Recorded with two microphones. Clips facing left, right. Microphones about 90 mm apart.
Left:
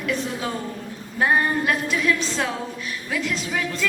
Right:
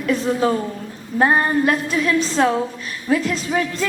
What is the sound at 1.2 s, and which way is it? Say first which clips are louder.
A woman's voice: right 4 dB; 40° right (ahead or behind).